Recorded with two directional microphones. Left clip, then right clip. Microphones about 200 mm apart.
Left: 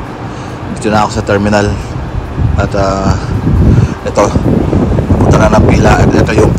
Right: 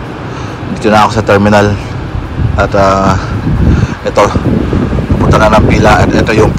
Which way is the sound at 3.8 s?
10° left (ahead or behind).